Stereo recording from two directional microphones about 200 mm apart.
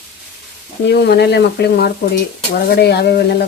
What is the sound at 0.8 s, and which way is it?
Speech, 55° left (ahead or behind).